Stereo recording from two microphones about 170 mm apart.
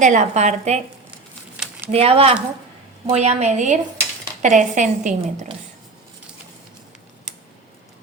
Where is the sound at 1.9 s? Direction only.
35° right (ahead or behind).